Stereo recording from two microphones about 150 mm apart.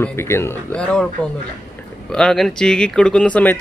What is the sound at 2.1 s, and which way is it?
Speech, 5° left (ahead or behind).